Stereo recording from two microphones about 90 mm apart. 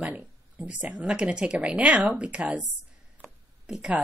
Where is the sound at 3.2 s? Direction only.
5° right (ahead or behind).